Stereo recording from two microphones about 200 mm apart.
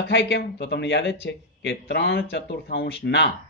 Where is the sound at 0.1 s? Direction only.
60° left (ahead or behind).